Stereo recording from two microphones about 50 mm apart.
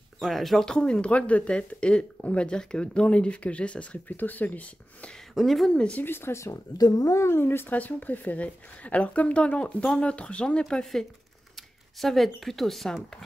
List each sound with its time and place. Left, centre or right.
0.2 s speech: centre
0.7 s speech: centre
4.2 s speech: left
5.3 s speech: centre
5.7 s speech: left
6.0 s speech: left
7.1 s speech: left
7.3 s speech: left
7.7 s speech: left; by 12.9 s centre